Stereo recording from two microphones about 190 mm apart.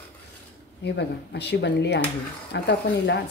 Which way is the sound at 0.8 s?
65° left (ahead or behind).